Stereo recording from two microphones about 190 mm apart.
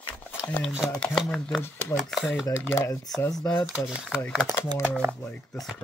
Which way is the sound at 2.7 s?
15° left (ahead or behind).